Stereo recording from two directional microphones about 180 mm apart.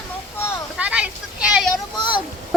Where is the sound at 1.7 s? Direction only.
25° left (ahead or behind).